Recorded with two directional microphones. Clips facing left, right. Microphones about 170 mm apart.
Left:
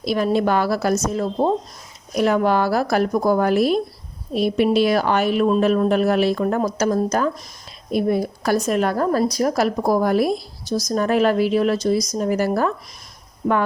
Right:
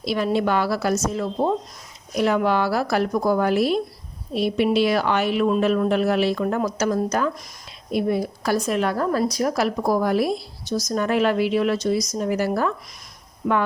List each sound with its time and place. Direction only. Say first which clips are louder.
0.0 s a woman's voice: left 3 dB; 45° left (ahead or behind)